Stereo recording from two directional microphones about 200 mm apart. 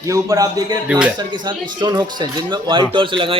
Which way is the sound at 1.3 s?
20° right (ahead or behind).